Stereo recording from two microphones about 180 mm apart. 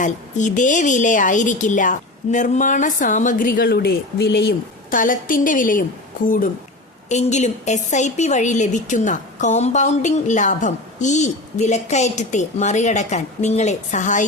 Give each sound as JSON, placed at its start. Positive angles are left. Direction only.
{"t": 0.0, "sound": "a woman's voice", "side_deg": 45}